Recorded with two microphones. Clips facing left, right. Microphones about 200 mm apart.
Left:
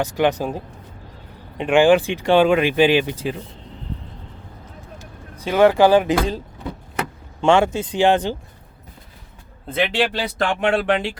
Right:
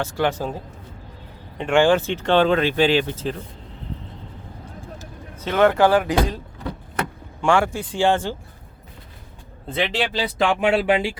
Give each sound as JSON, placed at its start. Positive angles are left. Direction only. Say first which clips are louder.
{"t": 0.0, "sound": "speech", "louder": "left 3 dB", "side_deg": 20}
{"t": 5.4, "sound": "speech", "louder": "left 3 dB", "side_deg": 10}
{"t": 7.4, "sound": "speech", "louder": "left 3 dB", "side_deg": 20}
{"t": 9.7, "sound": "speech", "louder": "left 3 dB", "side_deg": 0}